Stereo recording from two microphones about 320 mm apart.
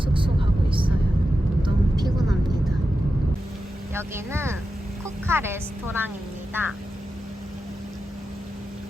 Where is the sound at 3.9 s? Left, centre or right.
Centre.